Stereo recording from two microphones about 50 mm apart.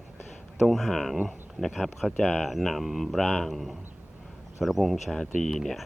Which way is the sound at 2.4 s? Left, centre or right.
Centre.